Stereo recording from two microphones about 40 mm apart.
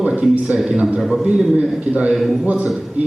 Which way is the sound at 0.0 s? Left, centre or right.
Right.